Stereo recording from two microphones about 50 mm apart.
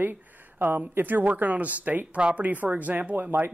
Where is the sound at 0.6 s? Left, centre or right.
Right.